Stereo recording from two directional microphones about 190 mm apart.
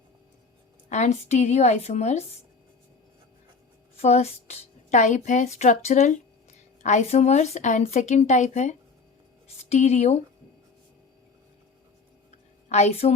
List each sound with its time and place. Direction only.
0.9 s speech: 35° left (ahead or behind)
3.9 s speech: 35° left (ahead or behind)
12.6 s a woman's voice: 35° left (ahead or behind)